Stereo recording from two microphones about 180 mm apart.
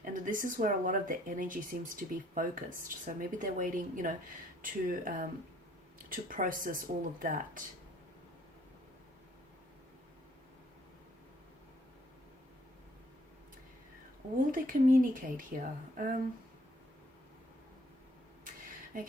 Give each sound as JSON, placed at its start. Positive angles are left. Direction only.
{"t": 0.0, "sound": "speech", "side_deg": -50}
{"t": 14.5, "sound": "speech", "side_deg": -50}
{"t": 18.9, "sound": "speech", "side_deg": -45}